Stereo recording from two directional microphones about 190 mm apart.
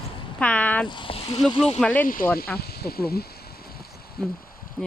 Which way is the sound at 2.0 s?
45° left (ahead or behind).